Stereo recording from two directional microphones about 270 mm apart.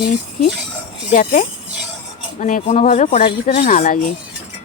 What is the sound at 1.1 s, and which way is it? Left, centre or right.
Speech, left.